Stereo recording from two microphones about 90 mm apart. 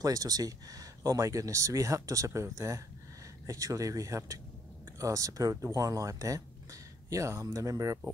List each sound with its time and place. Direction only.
0.0 s speech: 40° right (ahead or behind)